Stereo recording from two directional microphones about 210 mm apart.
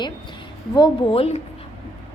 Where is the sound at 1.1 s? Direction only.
30° left (ahead or behind).